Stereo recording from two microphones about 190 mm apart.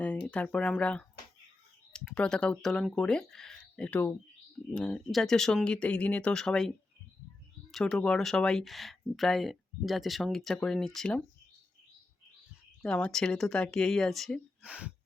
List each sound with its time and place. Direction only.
0.0 s speech: 5° left (ahead or behind)
12.8 s speech: 5° left (ahead or behind)